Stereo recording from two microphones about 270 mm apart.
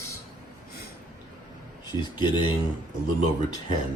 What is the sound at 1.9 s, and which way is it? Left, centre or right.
Speech, centre.